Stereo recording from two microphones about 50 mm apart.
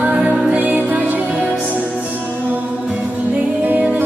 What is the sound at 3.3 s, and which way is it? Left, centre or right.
Music, right.